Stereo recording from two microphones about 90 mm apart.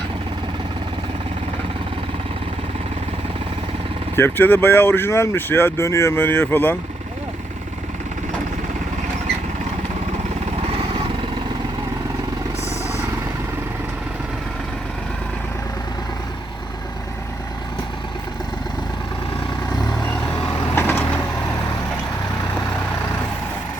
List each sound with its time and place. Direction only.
4.1 s speech: 25° left (ahead or behind)
10.7 s vehicle: 80° right
20.7 s vehicle: 25° left (ahead or behind)